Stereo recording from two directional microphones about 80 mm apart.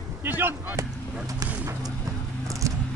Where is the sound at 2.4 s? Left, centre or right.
Right.